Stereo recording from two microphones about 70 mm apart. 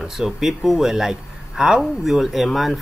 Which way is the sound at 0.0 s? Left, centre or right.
Centre.